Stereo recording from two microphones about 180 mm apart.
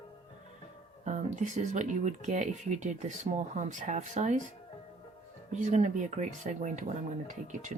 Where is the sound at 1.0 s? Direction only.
40° right (ahead or behind).